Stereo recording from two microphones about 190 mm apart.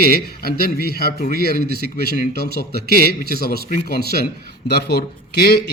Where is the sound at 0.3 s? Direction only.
55° left (ahead or behind).